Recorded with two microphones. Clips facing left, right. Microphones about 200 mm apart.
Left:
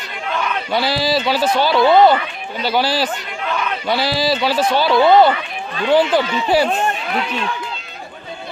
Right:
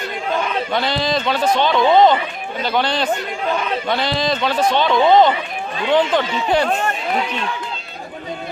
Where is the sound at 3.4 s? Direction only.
35° right (ahead or behind).